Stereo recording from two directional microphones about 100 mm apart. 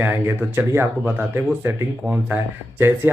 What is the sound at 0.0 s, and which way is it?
Speech, 20° right (ahead or behind).